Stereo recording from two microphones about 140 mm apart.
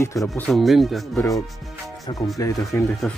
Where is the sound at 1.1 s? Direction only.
25° left (ahead or behind).